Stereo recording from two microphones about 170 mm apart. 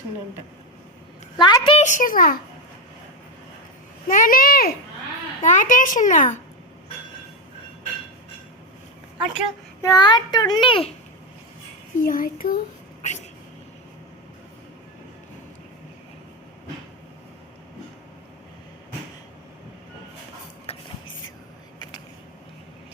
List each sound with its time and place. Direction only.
1.4 s a child's voice: 25° left (ahead or behind)
1.8 s a child's voice: 50° left (ahead or behind)
4.1 s a child's voice: 55° left (ahead or behind)
9.8 s a child's voice: 25° left (ahead or behind)
11.9 s a child's voice: 55° left (ahead or behind)
20.7 s music: 40° left (ahead or behind)